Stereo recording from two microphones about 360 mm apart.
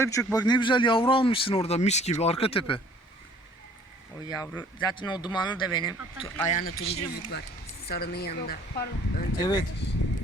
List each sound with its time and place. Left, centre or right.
0.0 s speech: centre
4.3 s speech: centre
6.5 s speech: left
9.4 s speech: centre